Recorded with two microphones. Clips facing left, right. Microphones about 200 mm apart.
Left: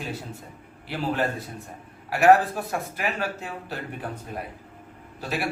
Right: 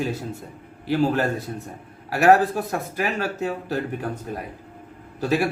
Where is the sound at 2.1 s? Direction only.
40° right (ahead or behind).